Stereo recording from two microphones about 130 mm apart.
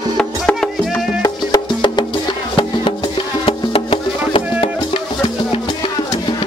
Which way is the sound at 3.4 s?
45° left (ahead or behind).